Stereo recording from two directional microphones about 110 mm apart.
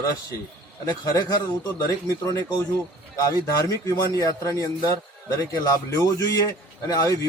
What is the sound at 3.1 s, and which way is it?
A man's voice, 35° left (ahead or behind).